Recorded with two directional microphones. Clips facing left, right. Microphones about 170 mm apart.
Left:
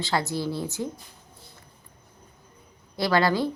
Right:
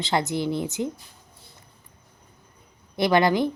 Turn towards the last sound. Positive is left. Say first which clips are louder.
# right 3 dB
turn(degrees=-20)  # may be behind; listen again after turning